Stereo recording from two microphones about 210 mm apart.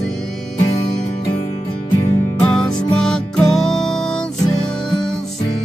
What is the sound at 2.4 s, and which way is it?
Music, 5° left (ahead or behind).